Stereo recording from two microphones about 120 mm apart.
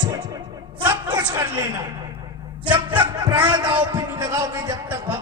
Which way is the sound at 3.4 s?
35° right (ahead or behind).